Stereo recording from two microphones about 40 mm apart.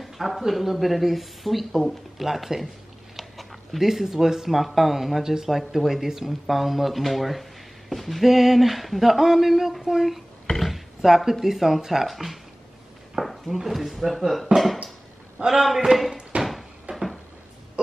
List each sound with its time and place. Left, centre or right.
0.0 s speech: centre
10.5 s a sound: centre
11.0 s speech: centre
16.9 s cupboard open or close: right